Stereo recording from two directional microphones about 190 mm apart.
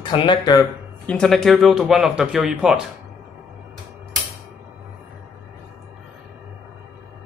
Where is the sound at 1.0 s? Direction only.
5° left (ahead or behind).